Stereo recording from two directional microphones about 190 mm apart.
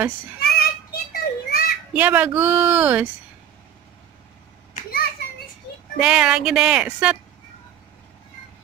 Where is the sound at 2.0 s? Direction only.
10° right (ahead or behind).